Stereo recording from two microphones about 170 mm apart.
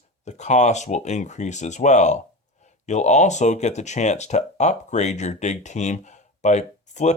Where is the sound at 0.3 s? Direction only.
45° left (ahead or behind).